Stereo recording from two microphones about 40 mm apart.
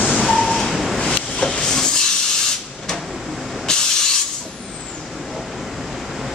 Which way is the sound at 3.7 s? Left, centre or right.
Left.